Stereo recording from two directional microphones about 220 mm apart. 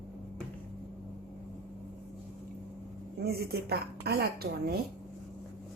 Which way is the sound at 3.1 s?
45° right (ahead or behind).